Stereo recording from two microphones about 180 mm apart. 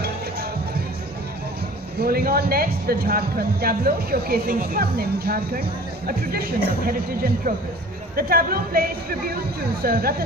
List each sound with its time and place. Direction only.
2.0 s speech: 55° right (ahead or behind)
6.8 s speech: 55° right (ahead or behind)